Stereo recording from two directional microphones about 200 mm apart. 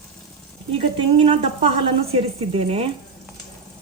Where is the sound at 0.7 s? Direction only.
25° right (ahead or behind).